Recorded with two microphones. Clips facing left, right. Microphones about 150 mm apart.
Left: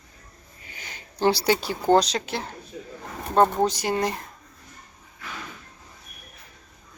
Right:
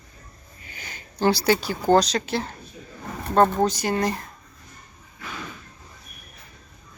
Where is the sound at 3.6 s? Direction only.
25° left (ahead or behind).